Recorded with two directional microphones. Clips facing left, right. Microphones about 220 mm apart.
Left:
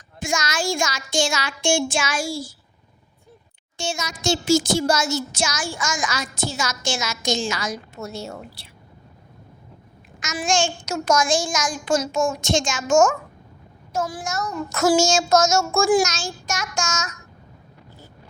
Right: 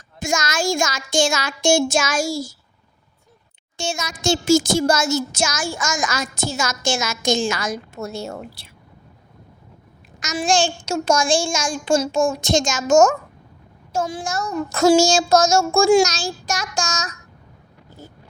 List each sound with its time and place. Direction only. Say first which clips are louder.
0.2 s speech: right 3 dB; 45° right (ahead or behind)
3.8 s speech: right 2 dB; 50° right (ahead or behind)
10.2 s child singing: right 3 dB; 35° right (ahead or behind)
13.9 s child singing: right 2 dB; 30° right (ahead or behind)